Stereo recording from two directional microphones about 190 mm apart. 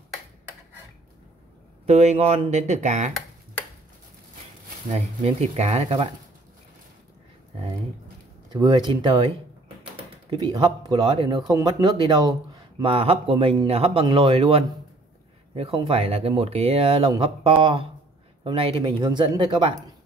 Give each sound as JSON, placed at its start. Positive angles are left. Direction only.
{"t": 1.9, "sound": "speech", "side_deg": -35}
{"t": 4.8, "sound": "speech", "side_deg": -35}
{"t": 8.5, "sound": "speech", "side_deg": -25}
{"t": 10.3, "sound": "speech", "side_deg": -20}